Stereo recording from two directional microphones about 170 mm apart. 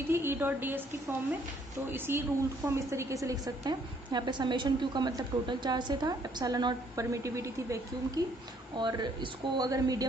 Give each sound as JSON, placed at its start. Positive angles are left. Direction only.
{"t": 0.1, "sound": "a woman's voice", "side_deg": -15}
{"t": 1.9, "sound": "a woman's voice", "side_deg": -10}